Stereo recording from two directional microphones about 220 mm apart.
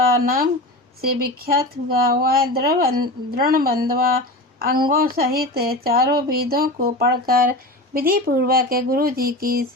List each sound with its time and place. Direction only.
0.3 s speech: 40° right (ahead or behind)